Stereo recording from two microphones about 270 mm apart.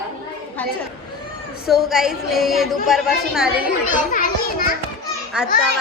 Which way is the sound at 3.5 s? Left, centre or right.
Left.